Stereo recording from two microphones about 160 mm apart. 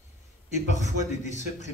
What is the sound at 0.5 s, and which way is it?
A man's voice, 50° left (ahead or behind).